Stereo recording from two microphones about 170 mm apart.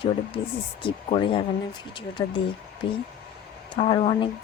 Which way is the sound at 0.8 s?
30° left (ahead or behind).